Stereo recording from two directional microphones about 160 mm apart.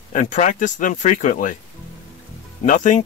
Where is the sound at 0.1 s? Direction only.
50° left (ahead or behind).